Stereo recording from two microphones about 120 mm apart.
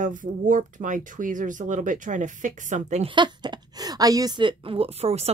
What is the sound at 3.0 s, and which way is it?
A woman's voice, 40° right (ahead or behind).